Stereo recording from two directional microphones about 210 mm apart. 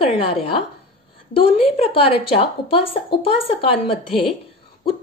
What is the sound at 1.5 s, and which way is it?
A woman's voice, 25° left (ahead or behind).